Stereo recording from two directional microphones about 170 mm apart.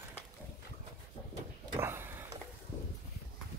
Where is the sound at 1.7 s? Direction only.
15° right (ahead or behind).